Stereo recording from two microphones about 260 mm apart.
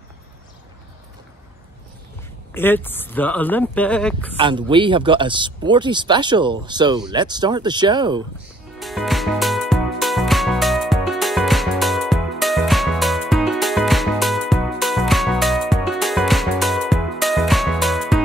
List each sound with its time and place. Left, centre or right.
2.5 s speech: centre
4.4 s speech: centre
8.7 s music: centre